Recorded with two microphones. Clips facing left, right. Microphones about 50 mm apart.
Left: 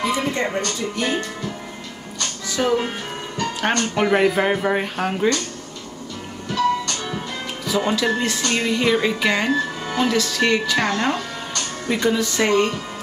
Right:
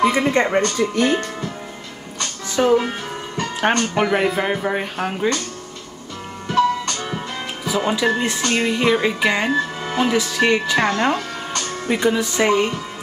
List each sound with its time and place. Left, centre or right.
0.0 s speech: right
2.1 s music: right
4.1 s speech: centre
6.5 s music: right
7.6 s speech: centre